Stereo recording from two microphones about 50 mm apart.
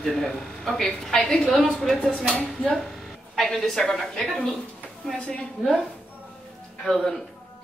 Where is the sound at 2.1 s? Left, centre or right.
Centre.